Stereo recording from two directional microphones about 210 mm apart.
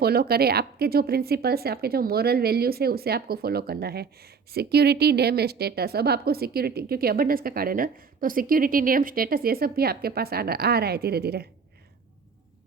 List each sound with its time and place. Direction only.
0.0 s speech: 50° right (ahead or behind)